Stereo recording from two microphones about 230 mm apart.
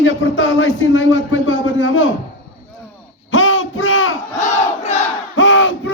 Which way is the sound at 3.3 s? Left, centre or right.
Left.